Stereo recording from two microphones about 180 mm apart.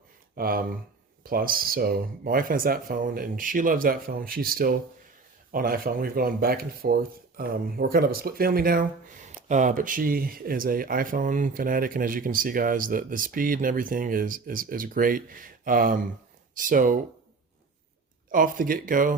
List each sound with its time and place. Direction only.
0.3 s speech: 55° right (ahead or behind)
18.3 s speech: 50° right (ahead or behind)